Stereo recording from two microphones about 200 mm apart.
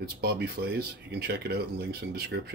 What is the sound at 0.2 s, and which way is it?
Speech, 55° right (ahead or behind).